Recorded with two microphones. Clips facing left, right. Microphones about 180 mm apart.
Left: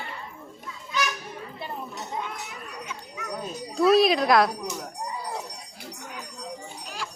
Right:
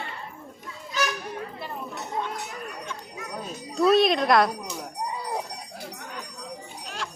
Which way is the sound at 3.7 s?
Centre (ahead or behind).